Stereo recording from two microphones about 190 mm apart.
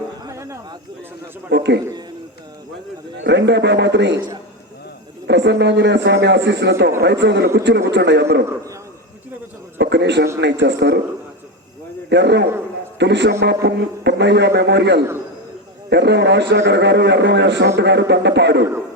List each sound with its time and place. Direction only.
0.3 s a sound: 15° right (ahead or behind)
1.5 s a man's voice: 65° right (ahead or behind)
3.2 s a man's voice: 65° right (ahead or behind)
5.2 s a man's voice: 65° right (ahead or behind)
9.7 s a sound: 65° right (ahead or behind)
10.4 s a man's voice: 65° right (ahead or behind)
12.0 s a man's voice: 65° right (ahead or behind)